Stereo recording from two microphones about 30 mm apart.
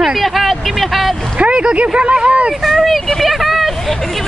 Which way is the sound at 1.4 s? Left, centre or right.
Right.